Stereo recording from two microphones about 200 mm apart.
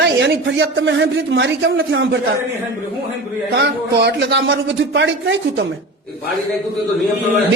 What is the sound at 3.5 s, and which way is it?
Speech, 55° right (ahead or behind).